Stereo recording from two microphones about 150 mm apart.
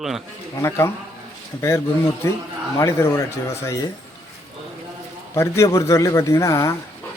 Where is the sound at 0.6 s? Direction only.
15° left (ahead or behind).